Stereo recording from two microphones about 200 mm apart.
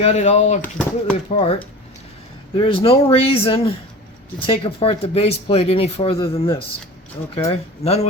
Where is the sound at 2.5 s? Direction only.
25° left (ahead or behind).